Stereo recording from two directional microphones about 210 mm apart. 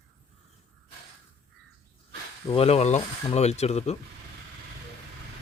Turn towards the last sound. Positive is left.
turn(degrees=30)  # may be behind; listen again after turning